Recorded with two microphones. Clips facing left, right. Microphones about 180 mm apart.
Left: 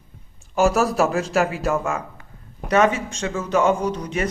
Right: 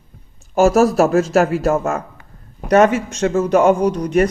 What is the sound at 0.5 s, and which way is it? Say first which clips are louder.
Speech: right 6 dB; 40° right (ahead or behind).